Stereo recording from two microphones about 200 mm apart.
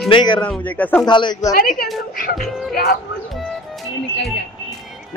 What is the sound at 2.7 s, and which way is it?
Speech, 50° left (ahead or behind).